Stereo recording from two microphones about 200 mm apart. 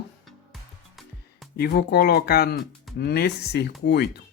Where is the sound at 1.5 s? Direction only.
55° left (ahead or behind).